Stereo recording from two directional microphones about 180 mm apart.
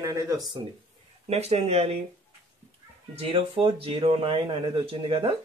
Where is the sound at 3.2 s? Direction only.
30° right (ahead or behind).